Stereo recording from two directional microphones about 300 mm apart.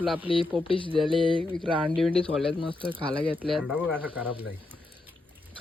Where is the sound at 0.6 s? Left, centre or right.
Centre.